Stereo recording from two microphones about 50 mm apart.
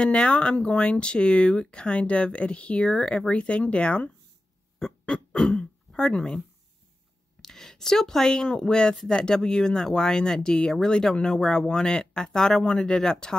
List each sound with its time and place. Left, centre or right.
0.0 s speech: left
4.7 s throat clearing: centre
7.4 s speech: centre